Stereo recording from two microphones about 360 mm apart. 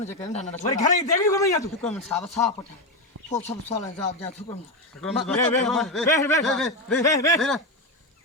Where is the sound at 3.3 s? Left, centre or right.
Centre.